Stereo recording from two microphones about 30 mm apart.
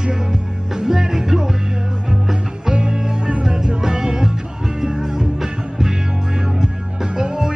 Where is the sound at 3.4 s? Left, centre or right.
Right.